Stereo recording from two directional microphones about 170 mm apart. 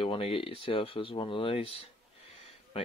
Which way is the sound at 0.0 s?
35° left (ahead or behind).